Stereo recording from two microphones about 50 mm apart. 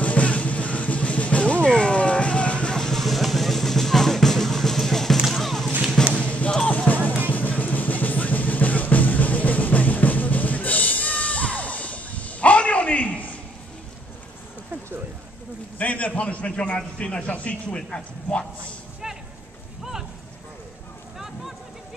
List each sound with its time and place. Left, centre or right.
0.0 s music: left; by 5.1 s centre
5.1 s music: centre
6.1 s music: left
15.8 s a sound: left
17.3 s speech: left
19.8 s a sound: centre